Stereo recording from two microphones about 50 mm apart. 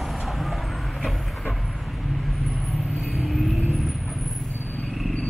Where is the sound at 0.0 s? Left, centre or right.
Centre.